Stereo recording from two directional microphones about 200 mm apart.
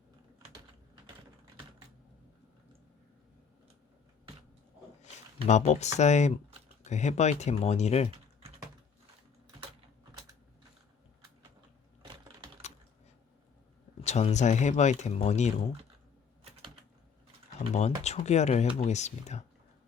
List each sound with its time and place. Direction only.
5.5 s speech: 35° left (ahead or behind)
14.0 s speech: 35° left (ahead or behind)
16.4 s typing: 30° right (ahead or behind)
17.7 s speech: 35° left (ahead or behind)